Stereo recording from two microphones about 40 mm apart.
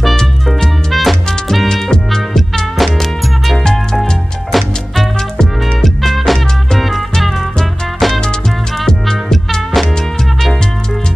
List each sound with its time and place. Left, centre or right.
0.9 s music: centre
5.4 s music: centre
6.0 s music: centre